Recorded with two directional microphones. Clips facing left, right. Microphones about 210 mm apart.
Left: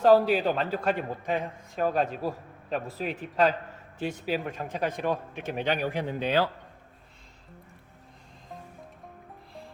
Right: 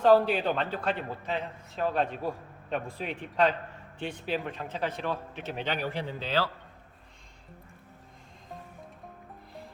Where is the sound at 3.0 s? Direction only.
Centre (ahead or behind).